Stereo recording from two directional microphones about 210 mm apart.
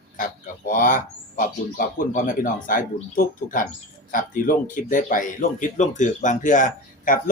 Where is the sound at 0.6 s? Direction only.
40° left (ahead or behind).